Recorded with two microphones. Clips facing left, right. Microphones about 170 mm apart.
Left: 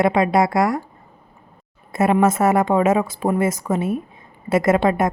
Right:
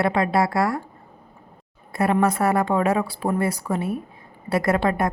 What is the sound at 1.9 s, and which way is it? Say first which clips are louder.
A woman's voice: left 4 dB; 20° left (ahead or behind).